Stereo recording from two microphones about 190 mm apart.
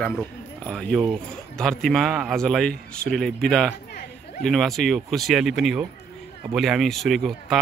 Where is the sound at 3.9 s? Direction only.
55° left (ahead or behind).